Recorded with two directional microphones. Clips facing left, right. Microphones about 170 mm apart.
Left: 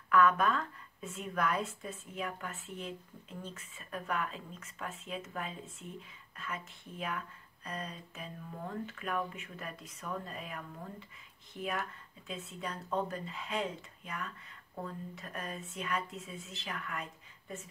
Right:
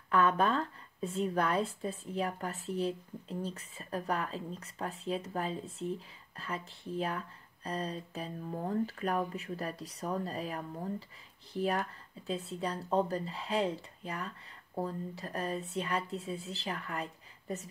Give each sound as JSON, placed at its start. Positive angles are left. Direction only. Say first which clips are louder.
{"t": 0.1, "sound": "speech", "louder": "even", "side_deg": -30}